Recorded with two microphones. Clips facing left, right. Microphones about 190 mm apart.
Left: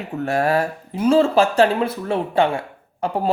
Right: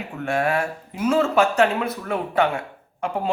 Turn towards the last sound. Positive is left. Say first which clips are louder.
# left 4 dB
turn(degrees=35)  # may be behind; listen again after turning